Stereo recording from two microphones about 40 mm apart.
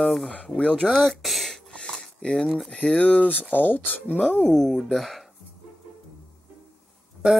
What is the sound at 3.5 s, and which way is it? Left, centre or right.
Speech, left.